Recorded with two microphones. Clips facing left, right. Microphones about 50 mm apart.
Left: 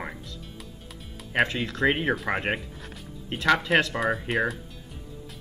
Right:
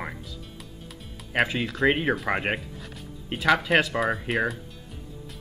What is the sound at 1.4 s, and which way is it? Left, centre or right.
Speech, centre.